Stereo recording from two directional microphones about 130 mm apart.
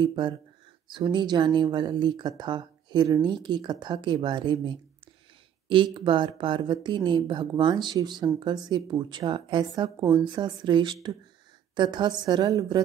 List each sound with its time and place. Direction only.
0.0 s speech: 35° right (ahead or behind)
5.9 s speech: 35° right (ahead or behind)